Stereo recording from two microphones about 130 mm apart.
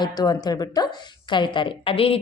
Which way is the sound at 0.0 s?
30° left (ahead or behind).